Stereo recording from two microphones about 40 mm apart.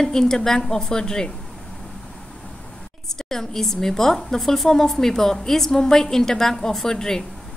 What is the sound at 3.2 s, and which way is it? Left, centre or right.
A woman's voice, centre.